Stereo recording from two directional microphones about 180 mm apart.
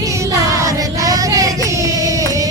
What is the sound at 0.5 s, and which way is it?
Female singing, 20° right (ahead or behind).